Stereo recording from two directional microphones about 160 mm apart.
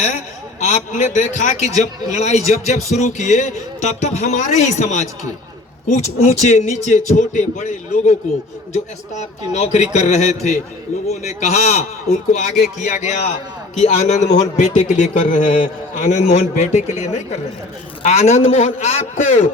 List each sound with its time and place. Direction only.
0.6 s a man's voice: 50° left (ahead or behind)
9.5 s a man's voice: 45° left (ahead or behind)